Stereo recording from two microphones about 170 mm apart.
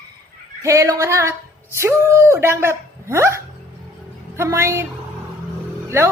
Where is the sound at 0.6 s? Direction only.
20° right (ahead or behind).